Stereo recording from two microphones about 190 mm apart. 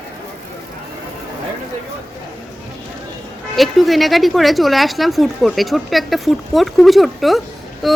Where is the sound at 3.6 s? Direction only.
Centre (ahead or behind).